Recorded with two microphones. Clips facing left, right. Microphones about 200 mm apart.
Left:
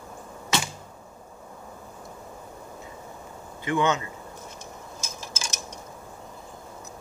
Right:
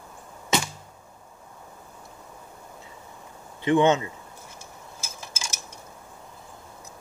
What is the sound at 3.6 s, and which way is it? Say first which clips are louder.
Speech: right 5 dB; 25° right (ahead or behind).